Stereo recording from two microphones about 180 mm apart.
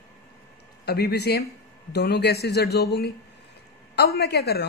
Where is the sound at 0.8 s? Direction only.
65° left (ahead or behind).